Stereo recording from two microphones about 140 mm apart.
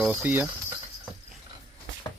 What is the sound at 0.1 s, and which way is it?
Speech, 15° right (ahead or behind).